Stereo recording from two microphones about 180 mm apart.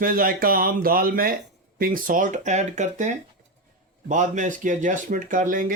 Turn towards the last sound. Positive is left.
turn(degrees=-45)  # may be behind; listen again after turning